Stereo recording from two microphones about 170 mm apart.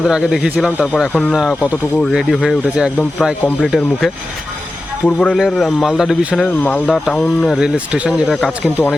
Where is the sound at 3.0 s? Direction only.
5° left (ahead or behind).